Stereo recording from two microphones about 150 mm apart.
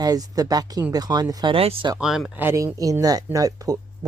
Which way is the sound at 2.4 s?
15° right (ahead or behind).